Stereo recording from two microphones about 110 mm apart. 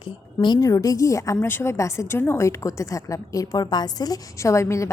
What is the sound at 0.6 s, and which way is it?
A woman's voice, 30° left (ahead or behind).